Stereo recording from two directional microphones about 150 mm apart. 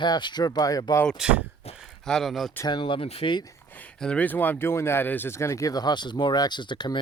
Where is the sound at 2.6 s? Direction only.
35° left (ahead or behind).